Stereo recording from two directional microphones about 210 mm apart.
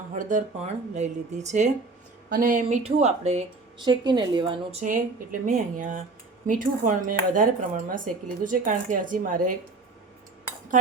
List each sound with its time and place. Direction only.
0.1 s speech: 35° right (ahead or behind)
3.8 s speech: 20° right (ahead or behind); by 9.6 s 40° right (ahead or behind)